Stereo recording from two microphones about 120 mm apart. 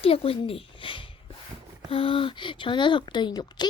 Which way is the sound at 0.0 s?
50° left (ahead or behind).